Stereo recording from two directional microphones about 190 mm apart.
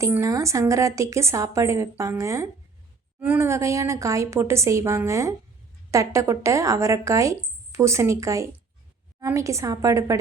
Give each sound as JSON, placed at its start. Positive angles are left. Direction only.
{"t": 0.0, "sound": "speech", "side_deg": -15}